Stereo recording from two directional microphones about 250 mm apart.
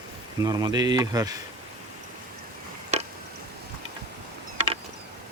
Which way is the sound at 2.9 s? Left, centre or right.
Right.